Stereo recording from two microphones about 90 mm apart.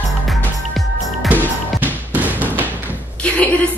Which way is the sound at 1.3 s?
20° right (ahead or behind).